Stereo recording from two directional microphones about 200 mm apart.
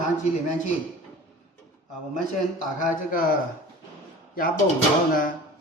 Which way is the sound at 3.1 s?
45° left (ahead or behind).